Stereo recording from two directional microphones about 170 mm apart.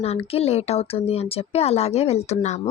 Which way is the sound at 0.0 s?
35° left (ahead or behind).